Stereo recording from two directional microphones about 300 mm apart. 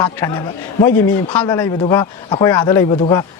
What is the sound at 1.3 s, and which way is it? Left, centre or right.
Speech, centre.